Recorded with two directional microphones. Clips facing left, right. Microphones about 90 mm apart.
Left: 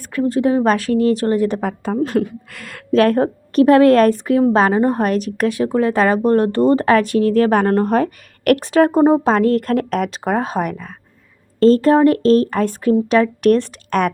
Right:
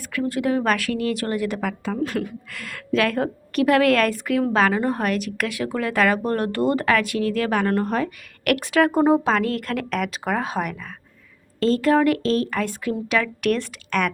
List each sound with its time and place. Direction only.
0.1 s speech: 30° left (ahead or behind)
8.5 s speech: 30° left (ahead or behind)